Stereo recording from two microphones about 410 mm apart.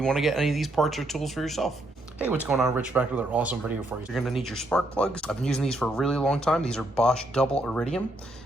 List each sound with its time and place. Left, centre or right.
0.0 s speech: centre